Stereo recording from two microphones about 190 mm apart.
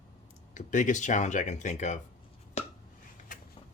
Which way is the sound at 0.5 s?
40° left (ahead or behind).